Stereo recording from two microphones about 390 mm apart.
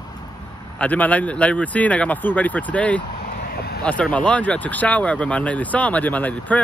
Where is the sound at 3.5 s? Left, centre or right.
Left.